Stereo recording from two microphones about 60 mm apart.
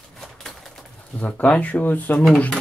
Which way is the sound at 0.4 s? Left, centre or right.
Centre.